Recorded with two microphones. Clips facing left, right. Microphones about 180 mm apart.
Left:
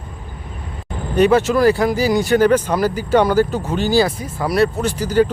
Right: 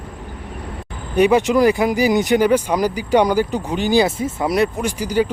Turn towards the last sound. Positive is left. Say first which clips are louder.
# left 3 dB
turn(degrees=-10)  # may be behind; listen again after turning